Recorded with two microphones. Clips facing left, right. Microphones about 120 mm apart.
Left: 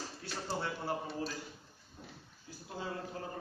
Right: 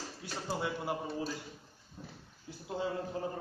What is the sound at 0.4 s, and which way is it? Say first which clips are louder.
Speech: right 2 dB; 10° right (ahead or behind).